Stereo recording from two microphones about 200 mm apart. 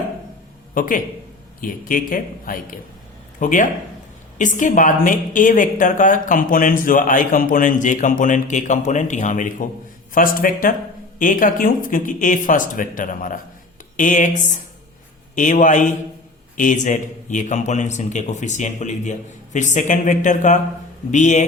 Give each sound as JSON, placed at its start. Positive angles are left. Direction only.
{"t": 0.7, "sound": "a man's voice", "side_deg": 40}